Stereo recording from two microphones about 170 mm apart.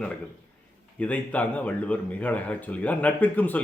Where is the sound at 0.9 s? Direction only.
10° left (ahead or behind).